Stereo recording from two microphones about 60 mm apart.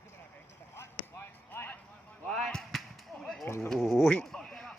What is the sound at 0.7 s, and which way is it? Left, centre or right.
Chop, left.